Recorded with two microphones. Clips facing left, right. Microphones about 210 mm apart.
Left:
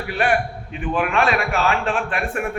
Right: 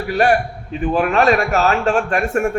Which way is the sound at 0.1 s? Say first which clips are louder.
Right 5 dB; 40° right (ahead or behind).